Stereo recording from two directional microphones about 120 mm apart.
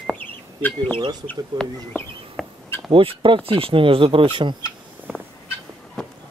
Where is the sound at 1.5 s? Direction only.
40° right (ahead or behind).